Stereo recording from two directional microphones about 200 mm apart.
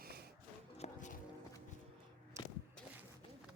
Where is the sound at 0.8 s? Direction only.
35° left (ahead or behind).